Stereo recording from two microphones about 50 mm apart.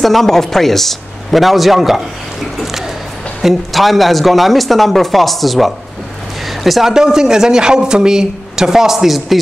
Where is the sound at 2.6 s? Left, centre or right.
Centre.